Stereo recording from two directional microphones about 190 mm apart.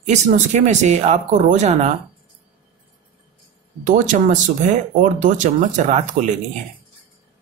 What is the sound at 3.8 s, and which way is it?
Speech, 40° right (ahead or behind).